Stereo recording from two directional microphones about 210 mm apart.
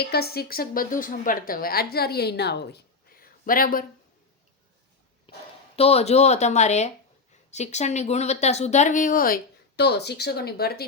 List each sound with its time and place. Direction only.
0.0 s a woman's voice: 50° left (ahead or behind)
5.3 s a sound: 25° left (ahead or behind)
5.7 s speech: 30° left (ahead or behind); by 10.8 s 50° left (ahead or behind)